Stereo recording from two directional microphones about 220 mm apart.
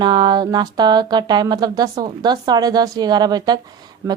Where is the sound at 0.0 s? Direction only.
20° right (ahead or behind).